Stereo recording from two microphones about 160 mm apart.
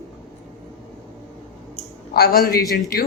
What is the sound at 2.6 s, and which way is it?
Speech, centre (ahead or behind).